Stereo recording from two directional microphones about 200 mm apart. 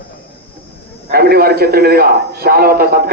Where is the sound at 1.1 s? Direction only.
50° right (ahead or behind).